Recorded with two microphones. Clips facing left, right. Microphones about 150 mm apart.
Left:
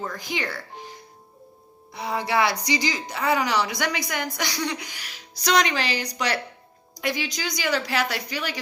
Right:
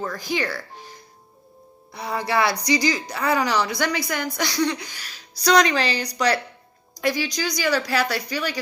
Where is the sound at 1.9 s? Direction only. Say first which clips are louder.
Right 1 dB; 20° left (ahead or behind).